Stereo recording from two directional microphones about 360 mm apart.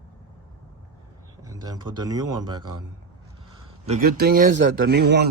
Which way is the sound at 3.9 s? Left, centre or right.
Right.